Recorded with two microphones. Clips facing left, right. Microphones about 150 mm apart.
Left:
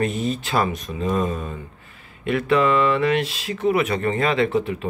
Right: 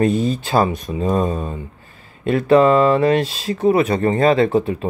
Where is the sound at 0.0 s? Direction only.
30° right (ahead or behind).